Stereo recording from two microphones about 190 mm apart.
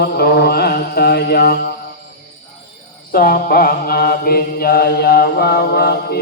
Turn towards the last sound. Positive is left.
turn(degrees=55)  # may be behind; listen again after turning